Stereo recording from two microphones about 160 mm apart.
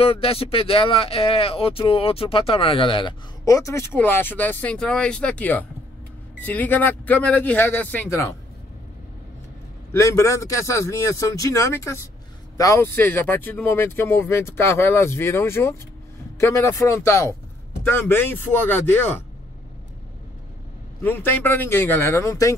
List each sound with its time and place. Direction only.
0.0 s speech: 35° left (ahead or behind); by 8.4 s 15° left (ahead or behind)
9.9 s speech: 20° left (ahead or behind)
21.0 s speech: 10° left (ahead or behind)